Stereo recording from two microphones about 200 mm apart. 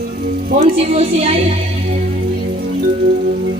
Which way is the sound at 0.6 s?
30° right (ahead or behind).